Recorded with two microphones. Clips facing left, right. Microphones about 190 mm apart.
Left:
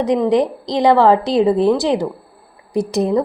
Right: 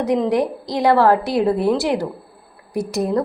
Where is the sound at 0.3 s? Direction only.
20° left (ahead or behind).